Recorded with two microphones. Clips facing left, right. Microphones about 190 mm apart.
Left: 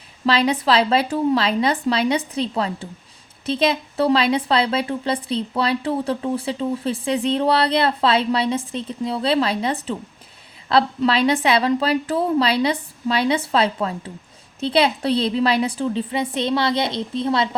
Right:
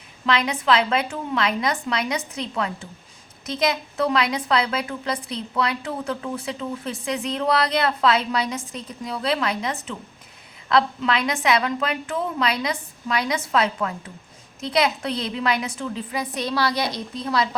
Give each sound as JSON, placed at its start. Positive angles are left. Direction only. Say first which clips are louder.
{"t": 0.3, "sound": "a woman's voice", "louder": "left 3 dB", "side_deg": 35}